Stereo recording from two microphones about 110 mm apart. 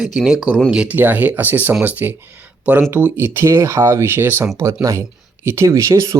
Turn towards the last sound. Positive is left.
turn(degrees=-30)  # may be behind; listen again after turning